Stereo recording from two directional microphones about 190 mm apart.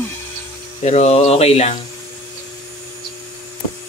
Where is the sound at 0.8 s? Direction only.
35° left (ahead or behind).